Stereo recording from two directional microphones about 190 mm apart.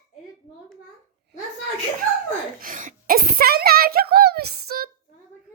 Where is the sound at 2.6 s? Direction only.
45° right (ahead or behind).